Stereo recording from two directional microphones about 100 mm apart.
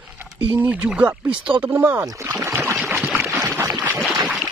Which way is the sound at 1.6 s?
20° right (ahead or behind).